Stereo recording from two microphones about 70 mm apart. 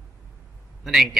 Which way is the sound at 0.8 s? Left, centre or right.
Centre.